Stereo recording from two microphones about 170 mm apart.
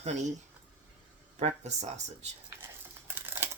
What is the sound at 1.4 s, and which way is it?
Speech, 40° right (ahead or behind).